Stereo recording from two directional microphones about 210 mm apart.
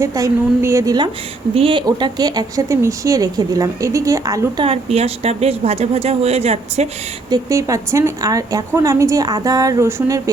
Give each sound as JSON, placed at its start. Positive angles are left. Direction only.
{"t": 0.0, "sound": "a woman's voice", "side_deg": -15}
{"t": 7.3, "sound": "a woman's voice", "side_deg": -15}